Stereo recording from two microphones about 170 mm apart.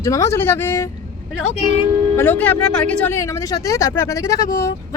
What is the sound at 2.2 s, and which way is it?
Speech, 10° left (ahead or behind).